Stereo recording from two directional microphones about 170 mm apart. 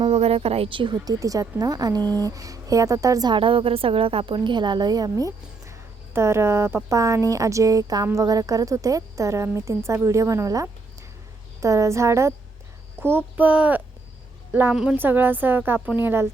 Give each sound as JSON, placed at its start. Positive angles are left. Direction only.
{"t": 0.0, "sound": "a woman's voice", "side_deg": -35}